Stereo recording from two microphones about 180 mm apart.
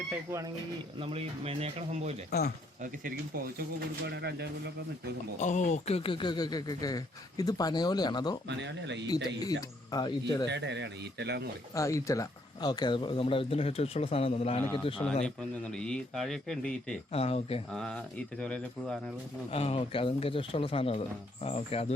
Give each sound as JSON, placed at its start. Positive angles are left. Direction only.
{"t": 0.1, "sound": "speech", "side_deg": -15}
{"t": 0.9, "sound": "speech", "side_deg": -30}
{"t": 2.8, "sound": "speech", "side_deg": -50}
{"t": 4.0, "sound": "speech", "side_deg": -65}
{"t": 5.4, "sound": "speech", "side_deg": 45}
{"t": 8.4, "sound": "speech", "side_deg": -75}
{"t": 9.4, "sound": "speech", "side_deg": 20}
{"t": 10.5, "sound": "speech", "side_deg": -75}
{"t": 11.7, "sound": "speech", "side_deg": 15}
{"t": 15.2, "sound": "a man's voice", "side_deg": 5}
{"t": 17.1, "sound": "speech", "side_deg": 35}
{"t": 17.7, "sound": "a man's voice", "side_deg": 5}
{"t": 19.5, "sound": "speech", "side_deg": 35}